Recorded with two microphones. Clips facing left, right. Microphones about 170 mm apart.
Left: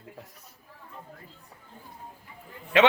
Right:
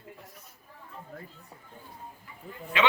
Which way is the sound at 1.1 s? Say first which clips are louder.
Right 6 dB; 45° right (ahead or behind).